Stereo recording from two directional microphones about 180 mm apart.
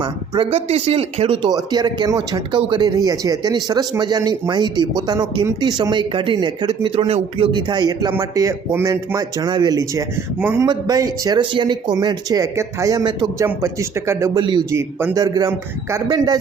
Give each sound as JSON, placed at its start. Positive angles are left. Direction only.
{"t": 0.0, "sound": "a man's voice", "side_deg": -30}